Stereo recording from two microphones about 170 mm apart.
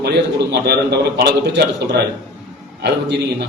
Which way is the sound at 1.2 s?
90° right.